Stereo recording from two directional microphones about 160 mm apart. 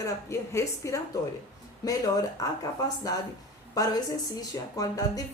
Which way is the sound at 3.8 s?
20° left (ahead or behind).